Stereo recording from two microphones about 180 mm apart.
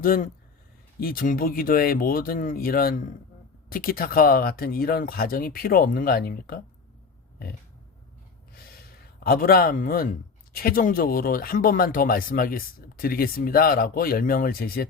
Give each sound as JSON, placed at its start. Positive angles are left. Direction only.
{"t": 0.0, "sound": "speech", "side_deg": 50}
{"t": 9.2, "sound": "speech", "side_deg": 55}